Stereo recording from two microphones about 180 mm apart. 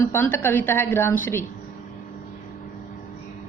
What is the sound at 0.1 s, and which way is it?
A woman's voice, 10° left (ahead or behind).